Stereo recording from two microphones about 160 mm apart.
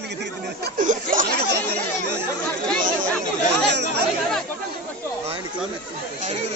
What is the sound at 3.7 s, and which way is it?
Chatter, 90° right.